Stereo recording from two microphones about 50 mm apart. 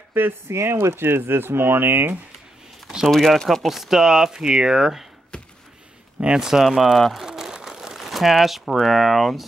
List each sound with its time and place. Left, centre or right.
0.5 s speech: right
3.1 s speech: centre
5.3 s a sound: left
6.2 s speech: centre
7.2 s crumpling: centre